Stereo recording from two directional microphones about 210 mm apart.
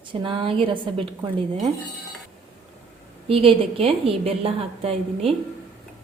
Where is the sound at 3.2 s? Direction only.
25° right (ahead or behind).